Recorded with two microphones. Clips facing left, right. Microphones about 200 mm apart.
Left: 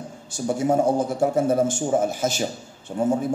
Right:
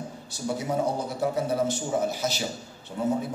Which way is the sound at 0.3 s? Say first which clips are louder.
Left 7 dB; 50° left (ahead or behind).